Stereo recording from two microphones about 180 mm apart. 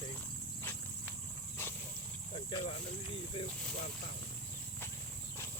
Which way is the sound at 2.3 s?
35° left (ahead or behind).